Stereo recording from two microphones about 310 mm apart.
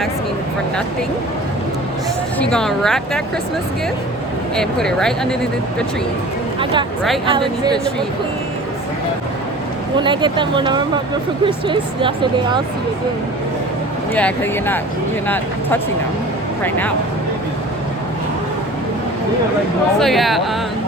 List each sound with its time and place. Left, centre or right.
2.4 s speech: centre
4.5 s speech: centre
7.3 s speech: centre
10.0 s speech: centre
14.1 s speech: centre
16.6 s speech: centre
20.0 s speech: centre